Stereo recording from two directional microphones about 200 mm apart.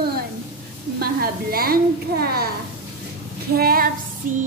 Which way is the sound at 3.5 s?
45° right (ahead or behind).